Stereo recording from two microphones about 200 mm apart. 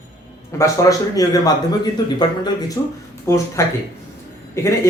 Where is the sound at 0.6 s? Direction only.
15° left (ahead or behind).